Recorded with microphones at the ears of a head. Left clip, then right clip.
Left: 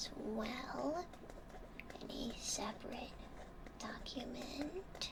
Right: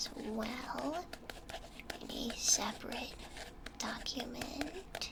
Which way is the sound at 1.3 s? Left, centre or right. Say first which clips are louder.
Right 8 dB; right.